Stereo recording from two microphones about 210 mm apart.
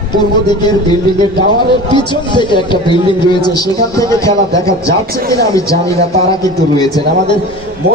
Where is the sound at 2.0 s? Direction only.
20° left (ahead or behind).